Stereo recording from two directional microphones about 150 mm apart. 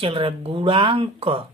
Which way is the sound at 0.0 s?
35° right (ahead or behind).